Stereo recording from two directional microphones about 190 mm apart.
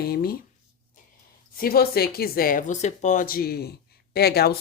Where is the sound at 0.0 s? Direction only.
55° left (ahead or behind).